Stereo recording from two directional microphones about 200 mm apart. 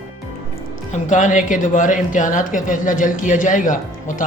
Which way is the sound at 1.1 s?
40° left (ahead or behind).